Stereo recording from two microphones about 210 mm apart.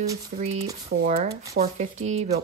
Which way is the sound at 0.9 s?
60° right (ahead or behind).